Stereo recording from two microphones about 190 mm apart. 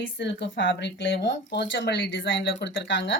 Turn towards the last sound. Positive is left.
turn(degrees=70)  # may be behind; listen again after turning